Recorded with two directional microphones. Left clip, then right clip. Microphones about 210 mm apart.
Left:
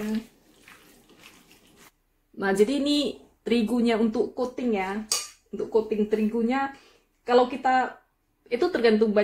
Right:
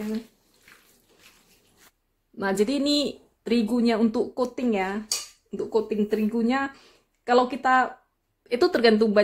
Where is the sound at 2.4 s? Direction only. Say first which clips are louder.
Left 1 dB; 30° right (ahead or behind).